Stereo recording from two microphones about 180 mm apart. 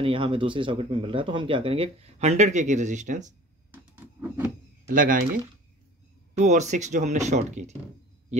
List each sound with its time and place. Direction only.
0.0 s speech: 30° right (ahead or behind)
3.7 s a sound: 10° right (ahead or behind)
4.9 s speech: 50° right (ahead or behind)